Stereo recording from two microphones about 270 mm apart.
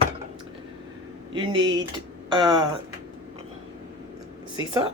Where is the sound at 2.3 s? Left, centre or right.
Centre.